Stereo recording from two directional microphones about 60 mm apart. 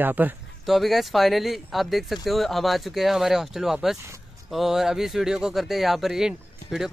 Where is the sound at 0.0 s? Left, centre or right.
Right.